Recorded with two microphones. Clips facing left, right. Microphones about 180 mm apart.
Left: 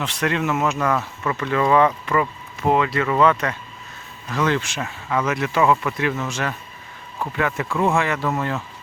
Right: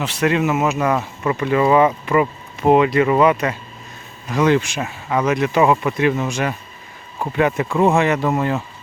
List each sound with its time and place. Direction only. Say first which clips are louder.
0.0 s speech: right 5 dB; 5° right (ahead or behind)